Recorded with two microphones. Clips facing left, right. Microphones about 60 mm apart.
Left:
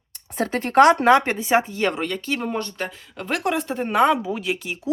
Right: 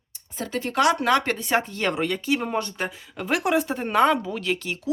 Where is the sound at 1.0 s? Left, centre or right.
Left.